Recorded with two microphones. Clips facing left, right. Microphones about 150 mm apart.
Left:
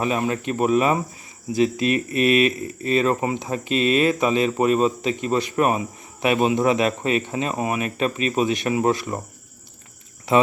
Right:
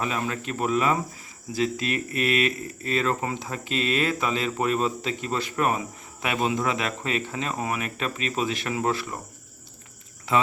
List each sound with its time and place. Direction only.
0.0 s speech: 25° left (ahead or behind)